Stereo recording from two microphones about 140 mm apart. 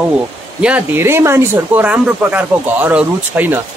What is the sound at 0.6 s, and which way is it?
Speech, 15° right (ahead or behind).